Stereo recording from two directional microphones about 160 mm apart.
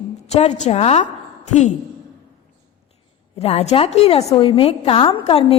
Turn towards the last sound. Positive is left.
turn(degrees=35)  # may be behind; listen again after turning